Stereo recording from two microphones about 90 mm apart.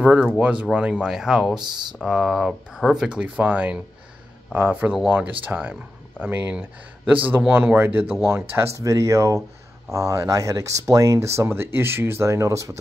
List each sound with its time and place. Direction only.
0.0 s speech: 15° right (ahead or behind)
1.5 s speech: 55° right (ahead or behind)
2.0 s speech: 5° right (ahead or behind); by 12.7 s 35° right (ahead or behind)